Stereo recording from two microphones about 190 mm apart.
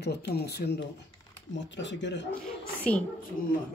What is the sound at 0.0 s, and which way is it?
Speech, 60° left (ahead or behind).